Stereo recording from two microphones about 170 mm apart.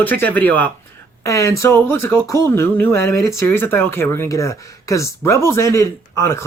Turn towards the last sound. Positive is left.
turn(degrees=15)  # may be behind; listen again after turning